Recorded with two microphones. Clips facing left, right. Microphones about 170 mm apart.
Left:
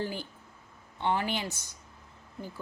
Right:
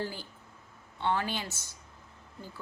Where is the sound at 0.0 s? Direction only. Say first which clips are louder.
Left 2 dB; 15° left (ahead or behind).